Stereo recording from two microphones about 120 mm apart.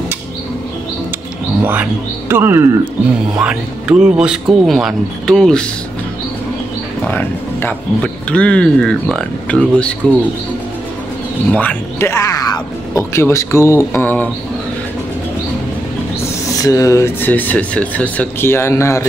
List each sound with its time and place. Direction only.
1.6 s speech: 15° right (ahead or behind)
3.3 s speech: 10° right (ahead or behind)
7.1 s speech: 15° left (ahead or behind)
11.5 s speech: 15° left (ahead or behind)
16.4 s speech: 30° left (ahead or behind)